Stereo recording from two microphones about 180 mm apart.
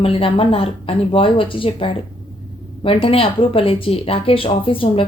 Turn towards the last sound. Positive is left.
turn(degrees=30)  # may be behind; listen again after turning